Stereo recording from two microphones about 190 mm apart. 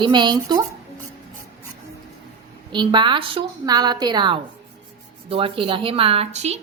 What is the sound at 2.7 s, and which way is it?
A woman's voice, 25° right (ahead or behind).